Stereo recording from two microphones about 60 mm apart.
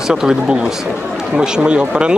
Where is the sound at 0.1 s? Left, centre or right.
Centre.